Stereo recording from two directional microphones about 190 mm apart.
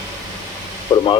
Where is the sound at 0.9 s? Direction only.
20° left (ahead or behind).